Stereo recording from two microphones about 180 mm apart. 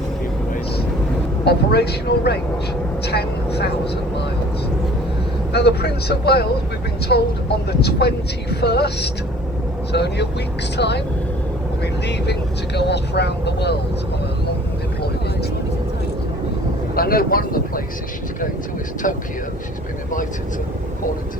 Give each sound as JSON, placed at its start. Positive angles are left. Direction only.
{"t": 1.5, "sound": "speech", "side_deg": 65}
{"t": 5.5, "sound": "speech", "side_deg": 65}
{"t": 16.9, "sound": "vehicle", "side_deg": 55}
{"t": 19.0, "sound": "speech", "side_deg": 50}